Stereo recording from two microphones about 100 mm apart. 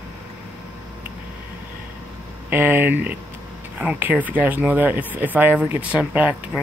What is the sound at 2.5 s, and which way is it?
Speech, 20° right (ahead or behind).